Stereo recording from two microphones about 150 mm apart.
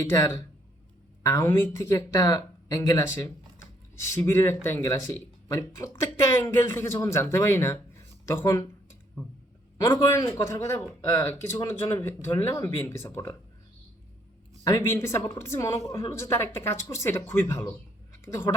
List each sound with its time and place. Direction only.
0.0 s a man's voice: 15° left (ahead or behind)
10.1 s a man's voice: 20° left (ahead or behind)
14.6 s a man's voice: 20° left (ahead or behind)
18.1 s a sound: 15° left (ahead or behind)